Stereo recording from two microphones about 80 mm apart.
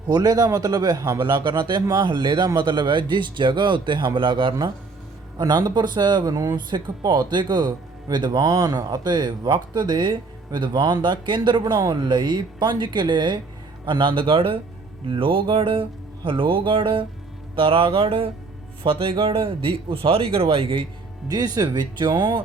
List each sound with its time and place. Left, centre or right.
0.1 s speech: right
5.4 s speech: right
6.3 s speech: right
10.7 s speech: right
13.8 s speech: right
21.2 s speech: right